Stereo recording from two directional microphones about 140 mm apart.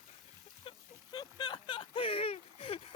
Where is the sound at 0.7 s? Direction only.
45° left (ahead or behind).